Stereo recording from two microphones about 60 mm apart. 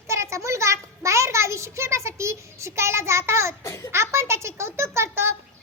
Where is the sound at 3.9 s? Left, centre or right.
Right.